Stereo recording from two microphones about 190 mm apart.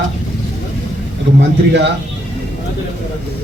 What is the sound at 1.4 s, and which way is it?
Speech, 70° right (ahead or behind).